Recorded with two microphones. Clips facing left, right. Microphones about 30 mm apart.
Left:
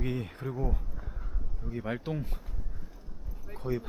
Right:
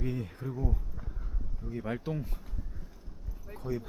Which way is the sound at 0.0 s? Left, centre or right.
Left.